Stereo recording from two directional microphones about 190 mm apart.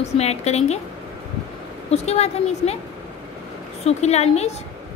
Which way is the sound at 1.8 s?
35° left (ahead or behind).